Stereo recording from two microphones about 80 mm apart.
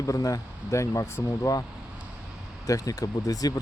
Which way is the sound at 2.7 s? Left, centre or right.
Left.